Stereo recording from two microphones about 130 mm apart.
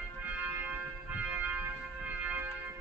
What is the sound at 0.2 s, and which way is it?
Music, 15° right (ahead or behind).